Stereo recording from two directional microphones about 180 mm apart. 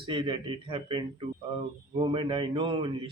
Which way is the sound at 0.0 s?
25° right (ahead or behind).